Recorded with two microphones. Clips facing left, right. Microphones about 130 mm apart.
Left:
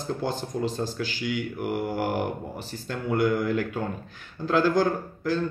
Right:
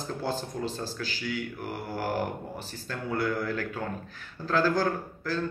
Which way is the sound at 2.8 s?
15° left (ahead or behind).